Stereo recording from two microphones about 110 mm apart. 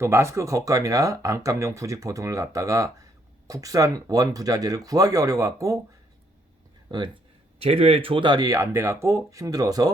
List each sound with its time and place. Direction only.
0.0 s speech: 25° right (ahead or behind)
6.8 s speech: 45° right (ahead or behind)
7.6 s speech: 65° right (ahead or behind); by 9.9 s 35° right (ahead or behind)